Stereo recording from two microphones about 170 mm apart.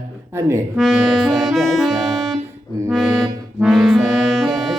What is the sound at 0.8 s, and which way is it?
Music, centre (ahead or behind).